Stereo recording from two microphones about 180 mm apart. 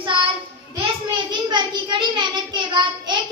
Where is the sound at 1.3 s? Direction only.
25° right (ahead or behind).